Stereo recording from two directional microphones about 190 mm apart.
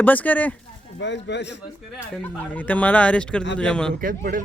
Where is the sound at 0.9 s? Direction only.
65° left (ahead or behind).